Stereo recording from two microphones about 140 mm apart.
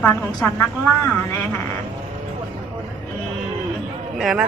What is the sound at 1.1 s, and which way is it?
Speech, 10° left (ahead or behind).